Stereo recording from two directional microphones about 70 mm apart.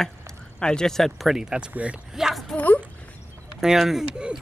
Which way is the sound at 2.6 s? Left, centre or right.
Left.